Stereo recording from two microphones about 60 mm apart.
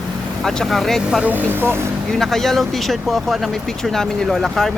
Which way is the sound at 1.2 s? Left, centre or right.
Right.